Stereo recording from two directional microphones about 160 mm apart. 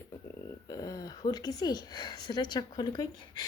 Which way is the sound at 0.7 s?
20° left (ahead or behind).